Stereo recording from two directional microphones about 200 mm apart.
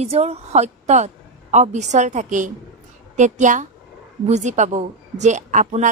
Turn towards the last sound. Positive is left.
turn(degrees=-40)  # may be behind; listen again after turning